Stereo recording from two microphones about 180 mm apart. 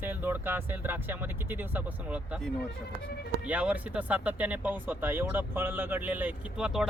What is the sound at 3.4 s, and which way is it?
Speech, 5° right (ahead or behind).